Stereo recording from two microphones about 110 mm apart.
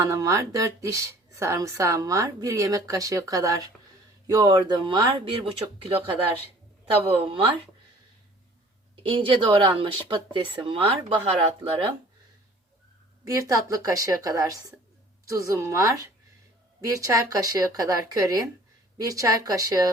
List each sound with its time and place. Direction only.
0.0 s speech: 30° right (ahead or behind); by 7.5 s 55° right (ahead or behind)
9.0 s speech: 50° right (ahead or behind)
13.2 s a woman's voice: 30° right (ahead or behind)